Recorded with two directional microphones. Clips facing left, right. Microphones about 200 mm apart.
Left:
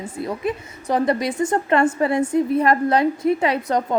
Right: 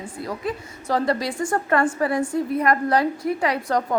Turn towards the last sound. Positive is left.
turn(degrees=20)  # may be behind; listen again after turning